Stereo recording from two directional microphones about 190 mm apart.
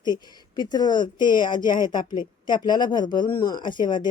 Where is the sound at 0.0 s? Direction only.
20° left (ahead or behind).